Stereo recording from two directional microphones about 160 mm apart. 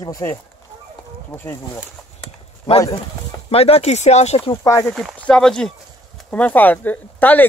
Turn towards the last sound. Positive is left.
turn(degrees=10)  # may be behind; listen again after turning